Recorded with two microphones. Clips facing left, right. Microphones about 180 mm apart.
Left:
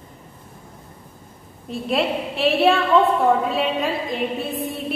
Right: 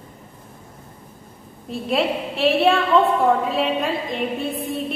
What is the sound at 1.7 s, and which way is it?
A woman's voice, centre (ahead or behind).